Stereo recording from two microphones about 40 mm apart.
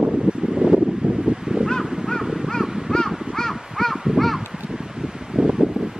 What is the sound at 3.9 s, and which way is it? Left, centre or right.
Crow, centre.